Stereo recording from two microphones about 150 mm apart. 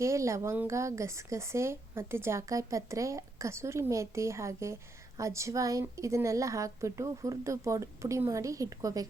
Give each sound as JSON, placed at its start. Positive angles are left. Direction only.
{"t": 0.0, "sound": "speech", "side_deg": -20}